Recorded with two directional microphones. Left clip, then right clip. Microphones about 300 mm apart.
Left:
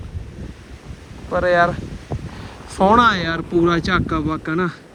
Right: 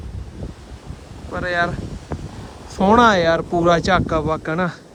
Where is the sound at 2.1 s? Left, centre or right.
Left.